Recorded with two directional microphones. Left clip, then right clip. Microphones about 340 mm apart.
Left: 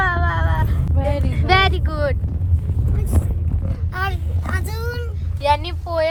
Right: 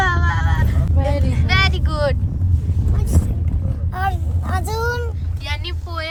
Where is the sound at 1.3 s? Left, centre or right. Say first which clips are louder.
Left 4 dB; centre.